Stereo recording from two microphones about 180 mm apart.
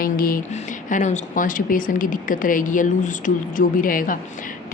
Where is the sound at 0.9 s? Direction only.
40° left (ahead or behind).